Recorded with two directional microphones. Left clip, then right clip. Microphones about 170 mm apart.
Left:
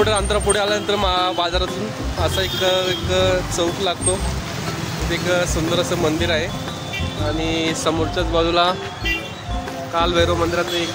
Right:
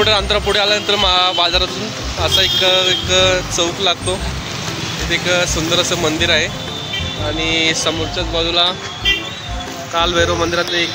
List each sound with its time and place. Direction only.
0.0 s speech: 15° left (ahead or behind)
5.1 s speech: 15° left (ahead or behind)
7.3 s music: 20° left (ahead or behind)
8.2 s speech: 40° left (ahead or behind)
9.9 s speech: 10° left (ahead or behind)